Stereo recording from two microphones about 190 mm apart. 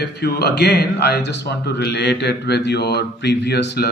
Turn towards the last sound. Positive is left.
turn(degrees=60)  # may be behind; listen again after turning